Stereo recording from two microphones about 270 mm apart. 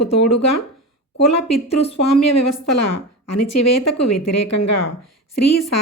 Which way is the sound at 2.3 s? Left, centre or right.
Left.